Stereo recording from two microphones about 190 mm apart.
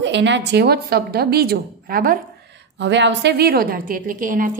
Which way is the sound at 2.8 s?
65° right (ahead or behind).